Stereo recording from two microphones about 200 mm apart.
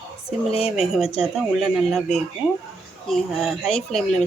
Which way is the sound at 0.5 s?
30° left (ahead or behind).